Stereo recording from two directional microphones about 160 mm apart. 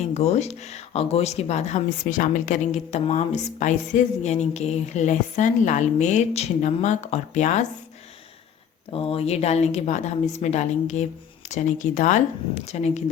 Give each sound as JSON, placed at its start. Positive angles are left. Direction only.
{"t": 0.0, "sound": "speech", "side_deg": 45}
{"t": 8.9, "sound": "speech", "side_deg": 35}